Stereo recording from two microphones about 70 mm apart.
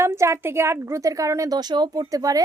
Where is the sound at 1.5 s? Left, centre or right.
Right.